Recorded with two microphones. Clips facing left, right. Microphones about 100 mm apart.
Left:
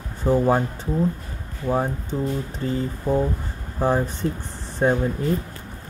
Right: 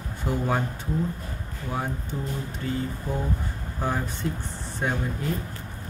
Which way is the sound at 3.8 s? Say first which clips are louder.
Left 7 dB; 35° left (ahead or behind).